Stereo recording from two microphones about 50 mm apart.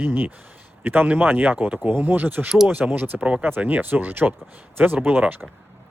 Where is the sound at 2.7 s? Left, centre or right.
Right.